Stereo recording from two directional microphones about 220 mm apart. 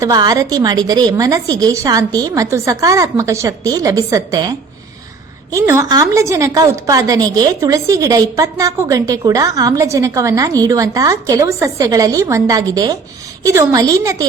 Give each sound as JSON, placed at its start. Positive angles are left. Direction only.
{"t": 0.0, "sound": "a woman's voice", "side_deg": -15}